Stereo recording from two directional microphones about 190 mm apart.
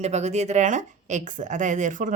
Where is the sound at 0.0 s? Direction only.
35° right (ahead or behind).